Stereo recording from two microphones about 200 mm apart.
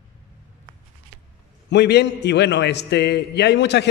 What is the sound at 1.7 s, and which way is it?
Speech, 55° left (ahead or behind).